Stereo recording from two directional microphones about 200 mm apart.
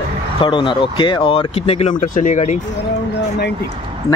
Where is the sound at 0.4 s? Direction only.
25° left (ahead or behind).